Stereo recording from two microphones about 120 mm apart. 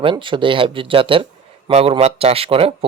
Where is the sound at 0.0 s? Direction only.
45° right (ahead or behind).